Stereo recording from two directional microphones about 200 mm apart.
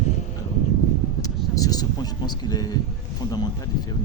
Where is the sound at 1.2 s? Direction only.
15° left (ahead or behind).